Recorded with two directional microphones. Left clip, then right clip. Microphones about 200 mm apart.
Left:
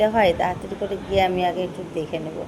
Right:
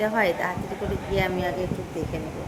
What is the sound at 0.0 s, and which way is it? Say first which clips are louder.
Speech: left 5 dB; 10° left (ahead or behind).